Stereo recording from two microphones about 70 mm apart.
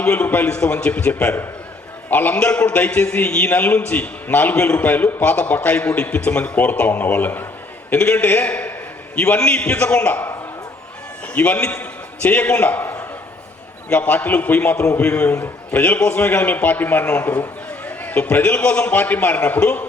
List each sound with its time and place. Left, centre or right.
0.0 s a man's voice: left
11.3 s a man's voice: left